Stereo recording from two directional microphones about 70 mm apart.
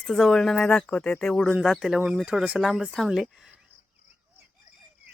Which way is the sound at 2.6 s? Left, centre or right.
Centre.